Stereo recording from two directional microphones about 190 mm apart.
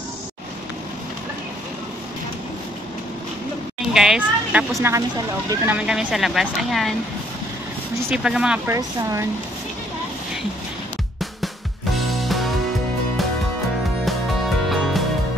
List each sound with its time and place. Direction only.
3.9 s speech: 5° right (ahead or behind)
8.1 s speech: 5° right (ahead or behind)
8.7 s speech: 15° right (ahead or behind)
12.1 s music: centre (ahead or behind)
14.0 s music: centre (ahead or behind)